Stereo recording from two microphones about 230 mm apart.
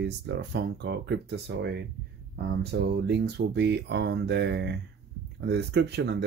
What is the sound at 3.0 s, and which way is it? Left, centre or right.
Speech, right.